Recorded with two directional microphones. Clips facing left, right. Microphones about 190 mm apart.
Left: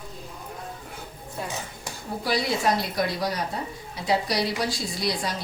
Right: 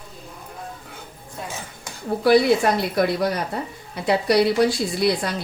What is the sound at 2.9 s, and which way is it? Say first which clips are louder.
A woman's voice: right 6 dB; 60° right (ahead or behind).